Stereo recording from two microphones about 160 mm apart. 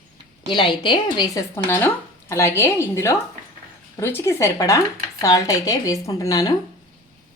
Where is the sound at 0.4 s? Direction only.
30° left (ahead or behind).